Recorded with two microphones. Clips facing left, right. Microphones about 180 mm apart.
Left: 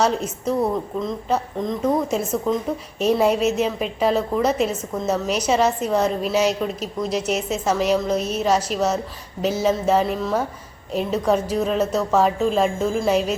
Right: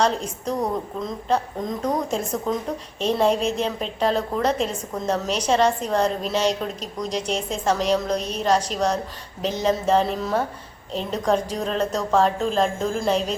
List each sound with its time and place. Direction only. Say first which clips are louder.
0.0 s a woman's voice: left 2 dB; 5° left (ahead or behind)